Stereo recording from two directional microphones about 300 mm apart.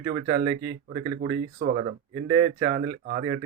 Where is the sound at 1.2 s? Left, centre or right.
Right.